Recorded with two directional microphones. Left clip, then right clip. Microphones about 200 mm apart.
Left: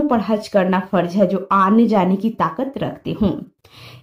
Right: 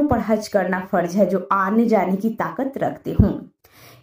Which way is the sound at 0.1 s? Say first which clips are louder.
Left 2 dB; 15° right (ahead or behind).